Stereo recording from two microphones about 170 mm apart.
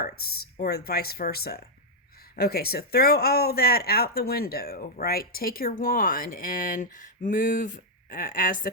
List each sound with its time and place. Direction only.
0.0 s speech: 65° left (ahead or behind)